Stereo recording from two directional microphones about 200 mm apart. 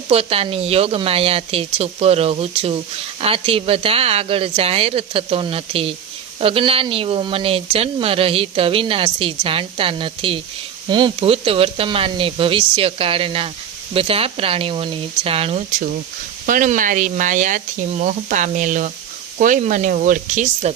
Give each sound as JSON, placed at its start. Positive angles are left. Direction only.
{"t": 0.1, "sound": "speech", "side_deg": -30}
{"t": 16.5, "sound": "speech", "side_deg": -40}